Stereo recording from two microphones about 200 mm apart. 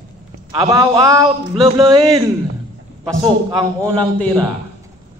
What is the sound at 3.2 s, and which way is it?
Speech, 15° right (ahead or behind).